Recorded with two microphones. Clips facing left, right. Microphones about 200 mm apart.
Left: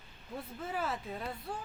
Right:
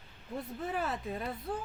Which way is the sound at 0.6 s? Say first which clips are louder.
Right 1 dB; centre (ahead or behind).